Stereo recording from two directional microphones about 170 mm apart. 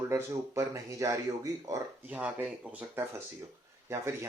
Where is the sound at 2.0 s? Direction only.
10° right (ahead or behind).